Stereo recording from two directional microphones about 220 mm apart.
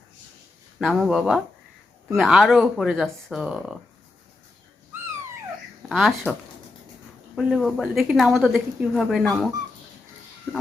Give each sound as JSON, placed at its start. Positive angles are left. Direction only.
{"t": 0.8, "sound": "speech", "side_deg": 0}
{"t": 5.9, "sound": "speech", "side_deg": 0}
{"t": 7.3, "sound": "speech", "side_deg": 0}